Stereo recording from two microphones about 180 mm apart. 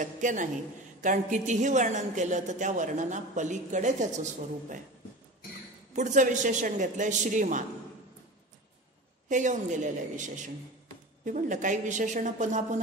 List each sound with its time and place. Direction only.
0.0 s a woman's voice: 45° right (ahead or behind)
5.9 s a woman's voice: 45° right (ahead or behind)
9.3 s a woman's voice: 45° right (ahead or behind)